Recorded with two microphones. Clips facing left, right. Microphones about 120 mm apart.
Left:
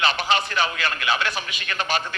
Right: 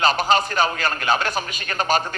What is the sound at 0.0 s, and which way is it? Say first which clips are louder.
A man's voice: right 4 dB; 40° right (ahead or behind).